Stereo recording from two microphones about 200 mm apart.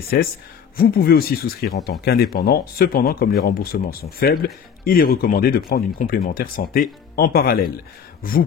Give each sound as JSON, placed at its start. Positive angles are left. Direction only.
{"t": 0.1, "sound": "speech", "side_deg": 50}